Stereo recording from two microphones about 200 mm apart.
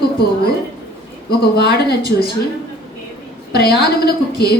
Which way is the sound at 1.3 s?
55° left (ahead or behind).